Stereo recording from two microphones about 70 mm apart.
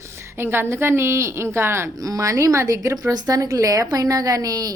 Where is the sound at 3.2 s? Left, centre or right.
Right.